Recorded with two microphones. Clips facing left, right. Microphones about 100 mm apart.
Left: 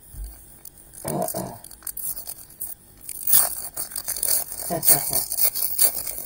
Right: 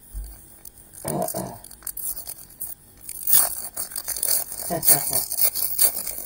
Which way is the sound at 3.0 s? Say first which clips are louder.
Even; 60° left (ahead or behind).